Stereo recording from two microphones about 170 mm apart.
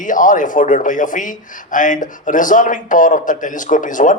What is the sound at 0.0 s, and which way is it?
Speech, 50° left (ahead or behind).